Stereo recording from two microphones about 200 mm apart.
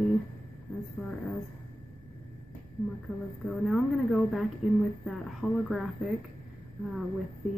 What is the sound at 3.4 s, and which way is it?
Speech, centre (ahead or behind).